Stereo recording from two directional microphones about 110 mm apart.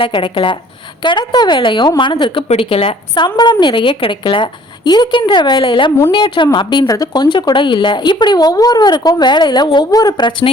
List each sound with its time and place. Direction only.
0.0 s a woman's voice: 50° left (ahead or behind)
2.5 s a woman's voice: 60° left (ahead or behind)
3.2 s a woman's voice: 45° left (ahead or behind)
6.8 s speech: 35° left (ahead or behind)